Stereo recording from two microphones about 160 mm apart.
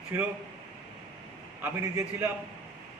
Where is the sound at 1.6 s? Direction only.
15° right (ahead or behind).